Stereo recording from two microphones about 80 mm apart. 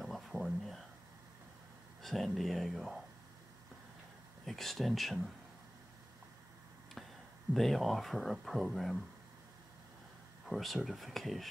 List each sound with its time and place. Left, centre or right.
0.0 s a sound: centre
2.0 s speech: centre
4.5 s speech: centre
7.5 s speech: centre
10.4 s speech: centre